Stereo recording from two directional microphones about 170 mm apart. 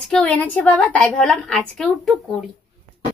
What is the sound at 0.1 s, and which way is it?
A woman's voice, 5° left (ahead or behind).